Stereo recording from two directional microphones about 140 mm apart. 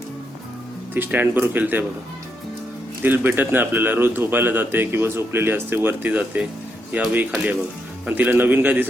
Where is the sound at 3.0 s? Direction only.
15° right (ahead or behind).